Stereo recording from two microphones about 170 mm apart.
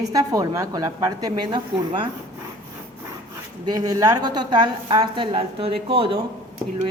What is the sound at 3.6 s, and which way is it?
A woman's voice, 20° right (ahead or behind).